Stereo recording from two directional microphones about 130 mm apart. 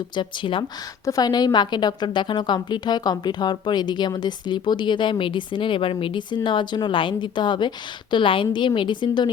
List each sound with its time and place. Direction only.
0.2 s a woman's voice: 40° left (ahead or behind)
1.0 s a woman's voice: 30° left (ahead or behind)